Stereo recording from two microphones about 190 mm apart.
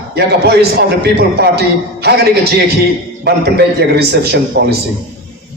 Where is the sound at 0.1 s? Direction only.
55° right (ahead or behind).